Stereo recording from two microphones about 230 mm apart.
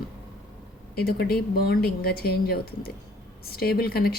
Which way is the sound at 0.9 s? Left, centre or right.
Left.